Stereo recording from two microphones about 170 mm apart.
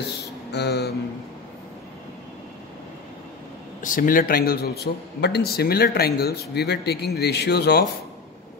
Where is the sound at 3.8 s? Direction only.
55° left (ahead or behind); by 7.8 s 75° left (ahead or behind).